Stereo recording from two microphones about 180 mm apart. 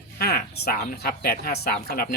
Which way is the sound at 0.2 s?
60° left (ahead or behind).